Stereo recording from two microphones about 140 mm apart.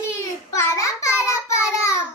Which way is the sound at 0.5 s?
20° left (ahead or behind).